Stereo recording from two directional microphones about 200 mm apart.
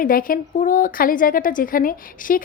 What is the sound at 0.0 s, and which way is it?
A woman's voice, 45° left (ahead or behind).